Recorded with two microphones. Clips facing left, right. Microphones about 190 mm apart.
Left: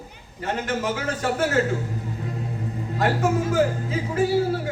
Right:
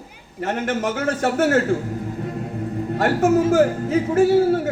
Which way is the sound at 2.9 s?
50° right (ahead or behind).